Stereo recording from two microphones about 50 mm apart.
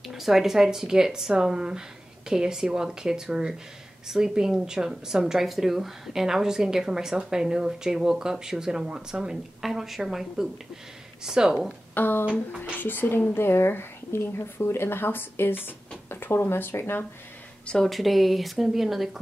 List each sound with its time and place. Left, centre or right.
0.1 s speech: centre
9.6 s speech: centre
11.9 s speech: left
17.8 s speech: centre